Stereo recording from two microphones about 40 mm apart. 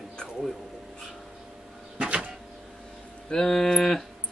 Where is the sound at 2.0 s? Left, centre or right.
Right.